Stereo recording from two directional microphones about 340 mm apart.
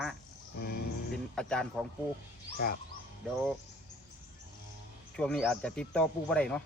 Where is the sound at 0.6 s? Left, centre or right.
Left.